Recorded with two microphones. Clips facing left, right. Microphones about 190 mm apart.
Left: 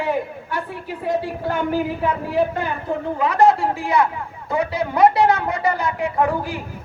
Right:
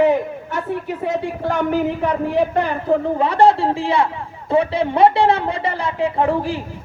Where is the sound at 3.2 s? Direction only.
30° right (ahead or behind).